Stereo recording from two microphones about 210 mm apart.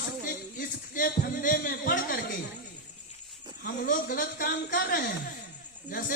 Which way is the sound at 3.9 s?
40° left (ahead or behind).